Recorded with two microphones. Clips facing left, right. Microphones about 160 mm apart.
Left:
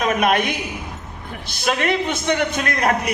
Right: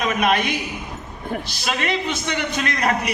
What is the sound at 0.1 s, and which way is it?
Speech, 50° left (ahead or behind).